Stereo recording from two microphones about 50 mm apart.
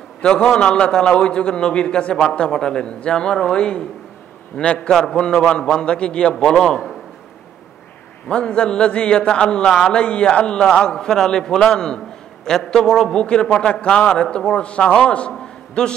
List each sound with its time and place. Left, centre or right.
0.2 s a man's voice: centre
8.3 s a man's voice: centre